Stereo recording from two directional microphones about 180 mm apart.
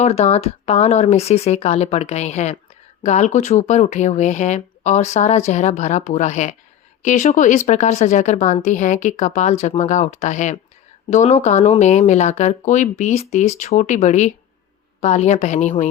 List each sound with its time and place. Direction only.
0.0 s speech: 35° left (ahead or behind)